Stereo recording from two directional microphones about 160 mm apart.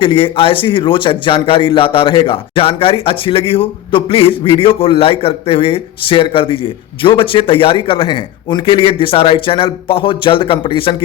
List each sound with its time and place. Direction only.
0.0 s a man's voice: 35° left (ahead or behind)